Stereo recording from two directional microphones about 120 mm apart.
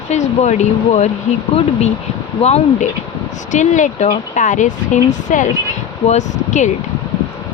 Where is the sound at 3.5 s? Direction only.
90° left.